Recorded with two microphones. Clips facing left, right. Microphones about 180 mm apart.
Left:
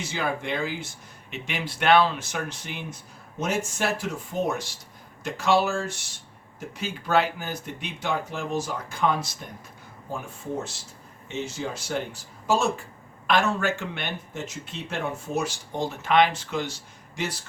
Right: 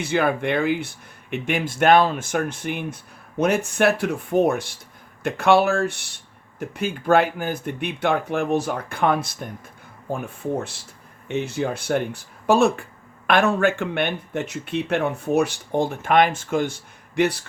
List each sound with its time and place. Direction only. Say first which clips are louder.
0.0 s speech: right 8 dB; 60° right (ahead or behind)